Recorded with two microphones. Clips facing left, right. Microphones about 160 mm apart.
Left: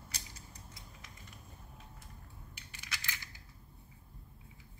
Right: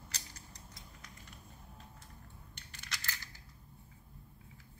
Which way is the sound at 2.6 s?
5° left (ahead or behind).